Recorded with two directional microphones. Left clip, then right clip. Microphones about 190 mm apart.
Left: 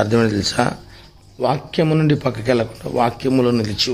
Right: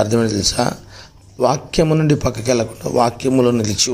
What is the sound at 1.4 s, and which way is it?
Speech, 15° right (ahead or behind).